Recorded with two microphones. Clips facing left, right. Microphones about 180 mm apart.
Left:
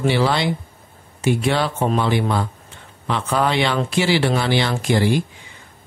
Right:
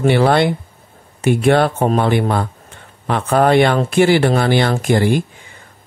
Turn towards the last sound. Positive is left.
turn(degrees=-50)  # may be behind; listen again after turning